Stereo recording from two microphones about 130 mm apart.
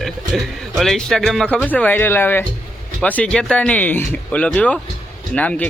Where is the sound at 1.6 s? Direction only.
10° left (ahead or behind).